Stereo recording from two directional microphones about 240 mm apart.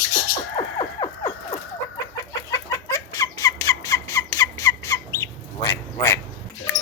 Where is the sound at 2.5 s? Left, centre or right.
Centre.